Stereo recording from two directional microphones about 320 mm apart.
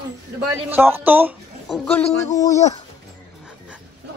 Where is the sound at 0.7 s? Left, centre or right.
Centre.